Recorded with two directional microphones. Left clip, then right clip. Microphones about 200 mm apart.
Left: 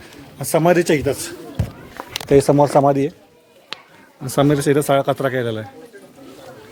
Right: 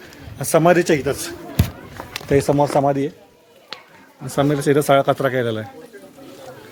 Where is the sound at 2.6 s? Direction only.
15° left (ahead or behind).